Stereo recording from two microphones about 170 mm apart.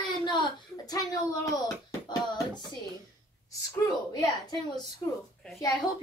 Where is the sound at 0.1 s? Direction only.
25° left (ahead or behind).